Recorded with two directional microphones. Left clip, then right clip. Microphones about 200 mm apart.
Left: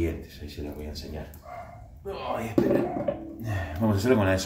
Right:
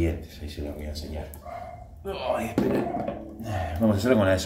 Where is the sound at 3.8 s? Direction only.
5° left (ahead or behind).